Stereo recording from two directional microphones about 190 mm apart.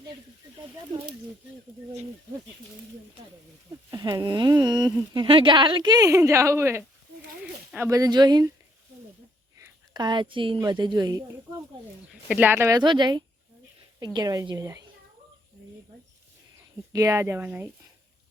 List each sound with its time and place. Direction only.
3.7 s speech: 20° right (ahead or behind)
7.9 s speech: 20° right (ahead or behind)
9.6 s speech: 20° right (ahead or behind)
12.3 s speech: 10° right (ahead or behind)
16.9 s speech: 15° right (ahead or behind)